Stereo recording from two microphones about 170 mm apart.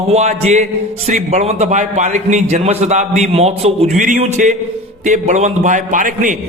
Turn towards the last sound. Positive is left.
turn(degrees=-50)  # may be behind; listen again after turning